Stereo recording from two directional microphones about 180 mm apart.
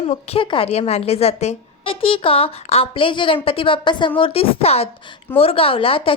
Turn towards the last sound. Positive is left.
turn(degrees=30)  # may be behind; listen again after turning